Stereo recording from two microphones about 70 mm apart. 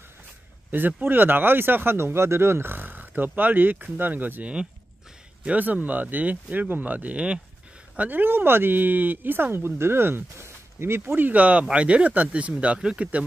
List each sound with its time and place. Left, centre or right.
0.7 s speech: right